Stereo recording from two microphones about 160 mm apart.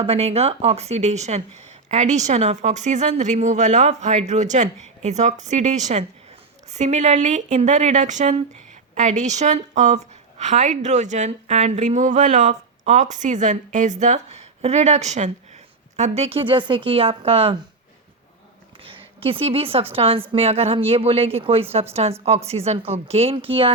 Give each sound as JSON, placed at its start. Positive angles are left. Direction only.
{"t": 0.0, "sound": "a woman's voice", "side_deg": -40}
{"t": 18.8, "sound": "a sound", "side_deg": -35}
{"t": 19.9, "sound": "a woman's voice", "side_deg": -35}